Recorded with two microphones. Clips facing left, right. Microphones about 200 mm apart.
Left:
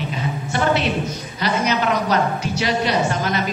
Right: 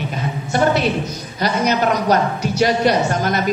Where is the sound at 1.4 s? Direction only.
45° right (ahead or behind).